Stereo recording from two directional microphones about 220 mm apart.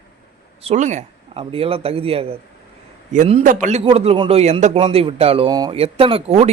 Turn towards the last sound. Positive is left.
turn(degrees=-25)  # may be behind; listen again after turning